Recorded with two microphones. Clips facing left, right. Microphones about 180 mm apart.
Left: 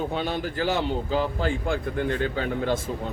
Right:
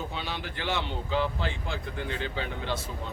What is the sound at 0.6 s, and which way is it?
Speech, 40° left (ahead or behind).